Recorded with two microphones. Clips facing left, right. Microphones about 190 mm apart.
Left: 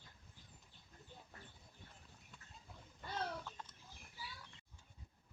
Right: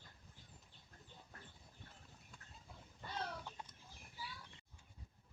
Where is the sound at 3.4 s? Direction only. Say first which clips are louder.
Even; 15° right (ahead or behind).